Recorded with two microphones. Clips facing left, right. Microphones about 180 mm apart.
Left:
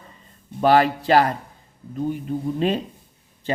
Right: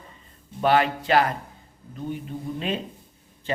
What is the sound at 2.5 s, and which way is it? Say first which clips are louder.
Speech: left 6 dB; 35° left (ahead or behind).